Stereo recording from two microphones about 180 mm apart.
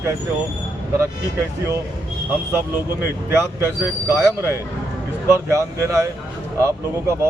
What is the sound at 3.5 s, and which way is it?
Speech, 15° right (ahead or behind).